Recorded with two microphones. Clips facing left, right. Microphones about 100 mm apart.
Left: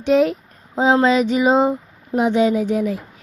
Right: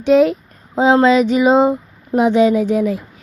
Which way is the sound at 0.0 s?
90° right.